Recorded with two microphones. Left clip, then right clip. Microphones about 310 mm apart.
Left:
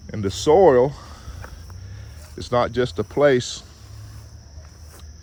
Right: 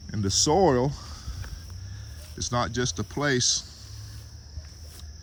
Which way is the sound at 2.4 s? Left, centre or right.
Centre.